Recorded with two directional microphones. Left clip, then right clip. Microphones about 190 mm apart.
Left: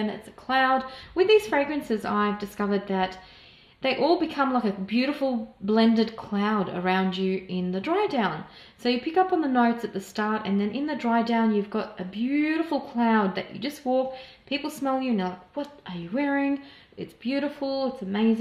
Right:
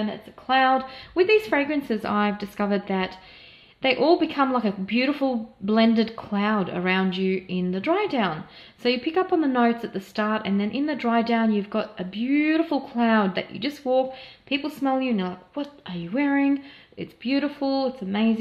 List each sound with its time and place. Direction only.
0.5 s a woman's voice: 30° right (ahead or behind)